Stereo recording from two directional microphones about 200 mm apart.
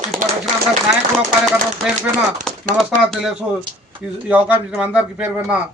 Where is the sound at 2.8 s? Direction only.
Centre (ahead or behind).